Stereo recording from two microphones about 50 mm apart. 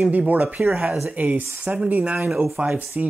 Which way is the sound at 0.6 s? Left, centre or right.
Centre.